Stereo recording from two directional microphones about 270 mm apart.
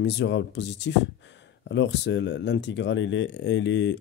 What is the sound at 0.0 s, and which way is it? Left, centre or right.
Speech, left.